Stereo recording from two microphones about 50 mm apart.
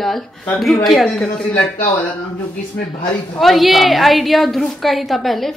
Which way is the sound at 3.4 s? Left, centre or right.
Centre.